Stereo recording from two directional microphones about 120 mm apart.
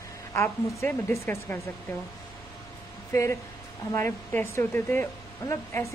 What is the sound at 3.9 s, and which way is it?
A woman's voice, 20° left (ahead or behind).